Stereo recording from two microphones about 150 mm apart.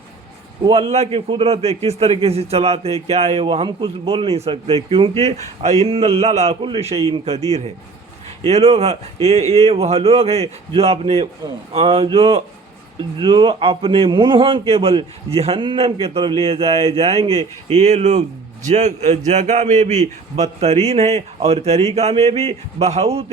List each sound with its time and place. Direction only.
0.7 s a man's voice: 40° right (ahead or behind)